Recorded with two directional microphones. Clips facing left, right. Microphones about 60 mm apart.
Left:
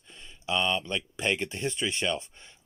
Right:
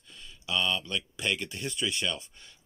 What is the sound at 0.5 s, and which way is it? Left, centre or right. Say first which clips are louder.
Speech: left 2 dB; left.